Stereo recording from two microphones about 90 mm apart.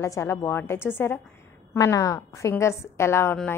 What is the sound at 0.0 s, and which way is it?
A woman's voice, 35° left (ahead or behind).